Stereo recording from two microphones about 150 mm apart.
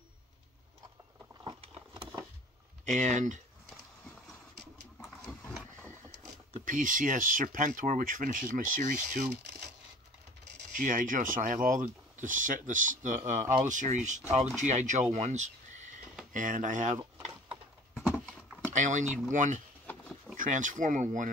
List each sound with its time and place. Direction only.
1.4 s vehicle: 40° right (ahead or behind)
2.9 s speech: 55° right (ahead or behind)
5.6 s vehicle: 10° left (ahead or behind)
6.6 s speech: 60° right (ahead or behind)
10.7 s speech: 60° right (ahead or behind)
15.1 s a sound: 55° right (ahead or behind)
16.3 s speech: 60° right (ahead or behind)
17.5 s clip-clop: 10° right (ahead or behind)
18.2 s power windows: 5° left (ahead or behind)
18.7 s speech: 55° right (ahead or behind)